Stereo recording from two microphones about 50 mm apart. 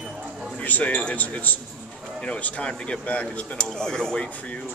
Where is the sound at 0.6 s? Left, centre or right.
Left.